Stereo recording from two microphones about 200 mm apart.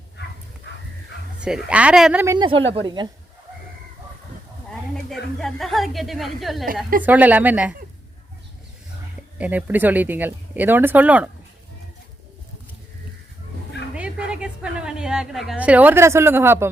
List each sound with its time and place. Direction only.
0.7 s bow-wow: 60° left (ahead or behind)
1.4 s a woman's voice: 5° right (ahead or behind)
2.2 s speech: 20° right (ahead or behind)
5.0 s a woman's voice: centre (ahead or behind)
9.4 s speech: 5° right (ahead or behind)
13.9 s a sound: 5° right (ahead or behind)